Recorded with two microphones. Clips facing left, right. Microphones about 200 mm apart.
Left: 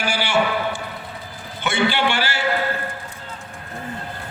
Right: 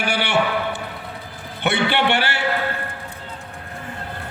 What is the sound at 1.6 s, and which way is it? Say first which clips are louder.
Speech: right 1 dB; 65° right (ahead or behind).